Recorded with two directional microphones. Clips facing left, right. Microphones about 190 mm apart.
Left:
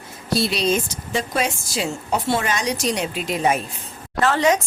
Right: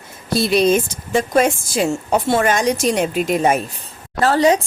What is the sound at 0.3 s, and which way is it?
A woman's voice, 50° right (ahead or behind).